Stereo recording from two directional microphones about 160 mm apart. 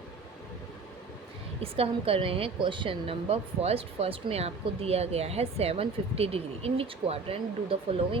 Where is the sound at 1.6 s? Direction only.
35° right (ahead or behind).